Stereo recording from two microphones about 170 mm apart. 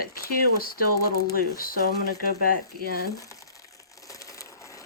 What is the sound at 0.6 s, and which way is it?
Speech, 60° left (ahead or behind).